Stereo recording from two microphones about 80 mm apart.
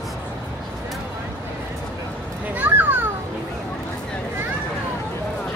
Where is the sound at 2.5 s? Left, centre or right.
Right.